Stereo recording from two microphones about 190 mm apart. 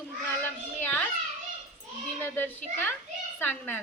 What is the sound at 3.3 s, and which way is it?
Speech, 10° left (ahead or behind).